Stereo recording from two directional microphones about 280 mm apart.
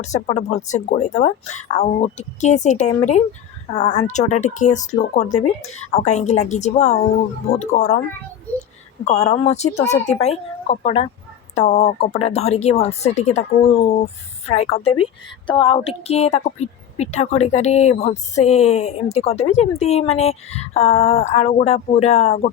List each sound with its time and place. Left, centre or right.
0.0 s a woman's voice: left
9.0 s a woman's voice: left